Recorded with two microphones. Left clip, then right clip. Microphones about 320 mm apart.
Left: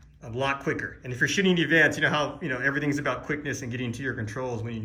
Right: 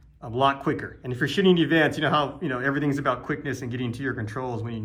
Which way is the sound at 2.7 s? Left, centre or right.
Centre.